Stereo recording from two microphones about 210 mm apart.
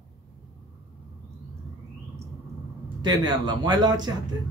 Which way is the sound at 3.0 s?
20° right (ahead or behind).